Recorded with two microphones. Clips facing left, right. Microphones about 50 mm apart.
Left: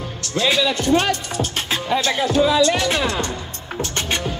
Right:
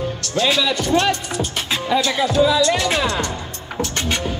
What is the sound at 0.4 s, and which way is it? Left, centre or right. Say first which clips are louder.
Speech: even; left.